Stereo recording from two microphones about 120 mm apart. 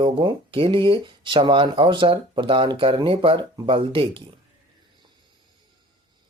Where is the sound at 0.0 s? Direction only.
45° right (ahead or behind).